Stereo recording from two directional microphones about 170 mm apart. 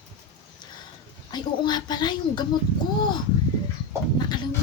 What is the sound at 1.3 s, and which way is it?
A woman's voice, 25° left (ahead or behind).